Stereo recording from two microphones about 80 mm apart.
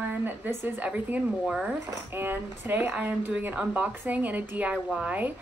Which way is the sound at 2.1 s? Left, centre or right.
Right.